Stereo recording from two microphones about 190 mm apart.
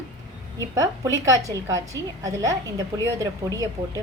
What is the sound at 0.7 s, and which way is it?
A woman's voice, 15° right (ahead or behind).